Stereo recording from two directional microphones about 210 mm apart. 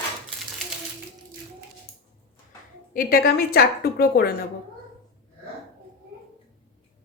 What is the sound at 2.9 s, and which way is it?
A woman's voice, 45° left (ahead or behind).